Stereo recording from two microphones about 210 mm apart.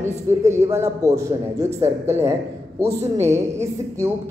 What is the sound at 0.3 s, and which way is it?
A woman's voice, 15° right (ahead or behind).